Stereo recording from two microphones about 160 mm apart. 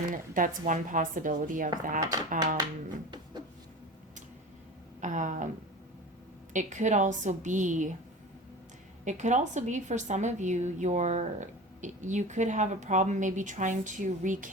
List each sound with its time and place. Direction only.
0.1 s a woman's voice: 55° right (ahead or behind)
4.9 s a woman's voice: 50° right (ahead or behind)
6.5 s a woman's voice: 50° right (ahead or behind)
9.0 s a woman's voice: 50° right (ahead or behind)